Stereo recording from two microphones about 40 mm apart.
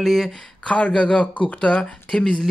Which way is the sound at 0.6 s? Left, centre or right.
Left.